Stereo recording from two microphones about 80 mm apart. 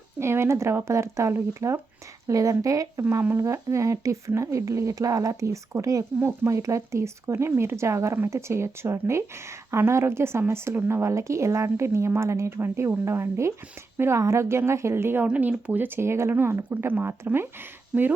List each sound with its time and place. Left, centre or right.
0.2 s speech: right
3.0 s speech: right
15.3 s speech: centre